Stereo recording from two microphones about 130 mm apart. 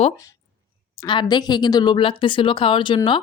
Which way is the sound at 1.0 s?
35° left (ahead or behind).